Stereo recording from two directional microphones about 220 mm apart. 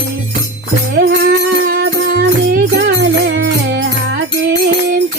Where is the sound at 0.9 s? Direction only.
45° right (ahead or behind).